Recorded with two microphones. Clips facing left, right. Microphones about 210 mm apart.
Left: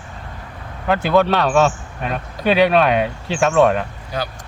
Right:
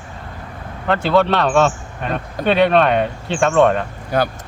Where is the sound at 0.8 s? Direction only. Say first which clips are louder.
Even; 5° left (ahead or behind).